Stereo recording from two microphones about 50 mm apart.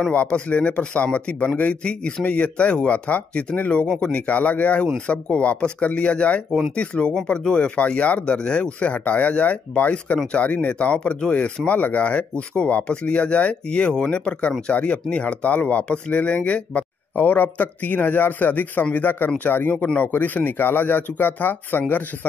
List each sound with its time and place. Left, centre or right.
0.1 s speech: left
10.1 s speech: centre
10.4 s speech: left
17.1 s speech: left